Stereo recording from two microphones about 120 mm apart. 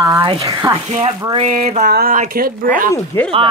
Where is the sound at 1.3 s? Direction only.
75° right (ahead or behind).